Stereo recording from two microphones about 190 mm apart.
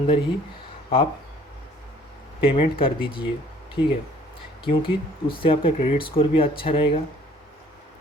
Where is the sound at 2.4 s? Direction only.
30° left (ahead or behind).